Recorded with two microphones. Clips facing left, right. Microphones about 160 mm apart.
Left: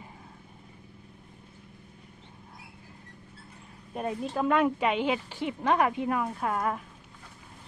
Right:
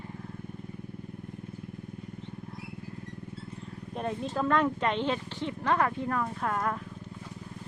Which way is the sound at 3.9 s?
5° left (ahead or behind).